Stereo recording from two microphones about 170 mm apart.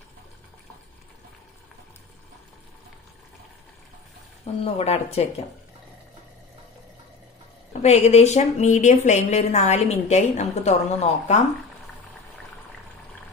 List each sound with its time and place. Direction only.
4.6 s a woman's voice: 40° left (ahead or behind)
7.8 s a woman's voice: 40° left (ahead or behind)